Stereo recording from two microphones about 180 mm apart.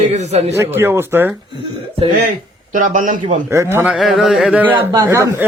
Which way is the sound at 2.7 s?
45° right (ahead or behind).